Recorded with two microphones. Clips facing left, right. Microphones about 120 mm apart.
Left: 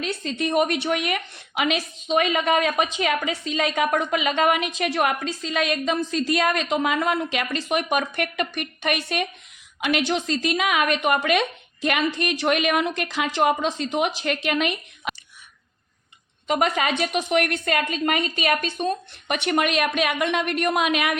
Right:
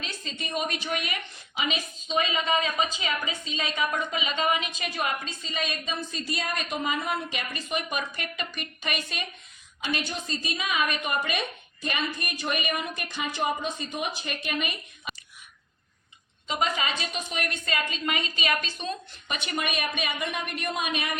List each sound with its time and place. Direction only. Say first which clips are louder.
0.0 s a woman's voice: left 11 dB; 60° left (ahead or behind)
9.8 s a woman's voice: left 9 dB; 80° left
16.5 s a woman's voice: left 6 dB; 60° left (ahead or behind); by 21.2 s 85° left